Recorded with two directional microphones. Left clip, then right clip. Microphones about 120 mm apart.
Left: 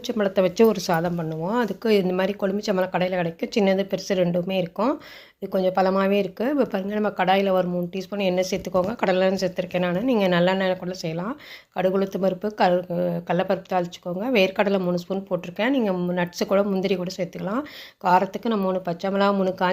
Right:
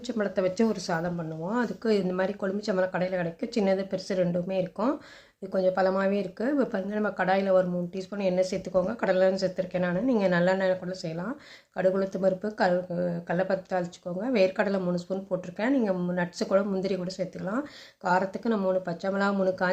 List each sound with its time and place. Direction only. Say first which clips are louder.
0.1 s speech: left 6 dB; 30° left (ahead or behind)
1.5 s speech: left 5 dB; 20° left (ahead or behind)